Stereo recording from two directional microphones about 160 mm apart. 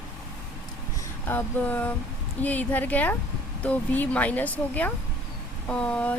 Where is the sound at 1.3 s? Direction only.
10° left (ahead or behind).